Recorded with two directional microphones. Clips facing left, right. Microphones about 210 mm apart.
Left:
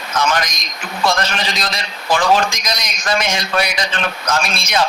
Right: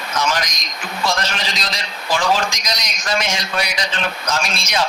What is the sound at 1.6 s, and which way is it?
A man's voice, 55° left (ahead or behind).